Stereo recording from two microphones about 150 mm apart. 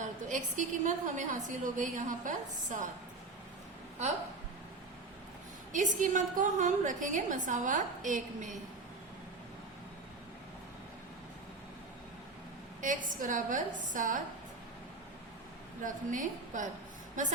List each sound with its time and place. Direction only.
0.0 s a woman's voice: 55° right (ahead or behind)
5.7 s a woman's voice: 55° right (ahead or behind)
12.8 s a woman's voice: 60° right (ahead or behind)
15.8 s a woman's voice: 60° right (ahead or behind)